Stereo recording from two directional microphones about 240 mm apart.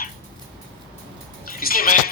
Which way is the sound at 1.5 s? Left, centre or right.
Left.